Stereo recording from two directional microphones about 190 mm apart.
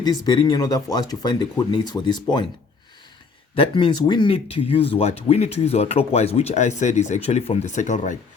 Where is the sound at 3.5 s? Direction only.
30° left (ahead or behind).